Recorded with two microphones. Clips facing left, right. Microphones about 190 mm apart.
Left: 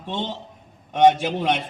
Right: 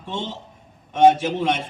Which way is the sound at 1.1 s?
45° right (ahead or behind).